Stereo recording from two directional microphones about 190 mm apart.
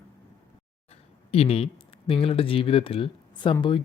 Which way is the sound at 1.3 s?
30° left (ahead or behind).